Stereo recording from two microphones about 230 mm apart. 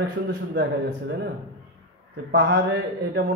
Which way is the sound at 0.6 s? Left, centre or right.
Right.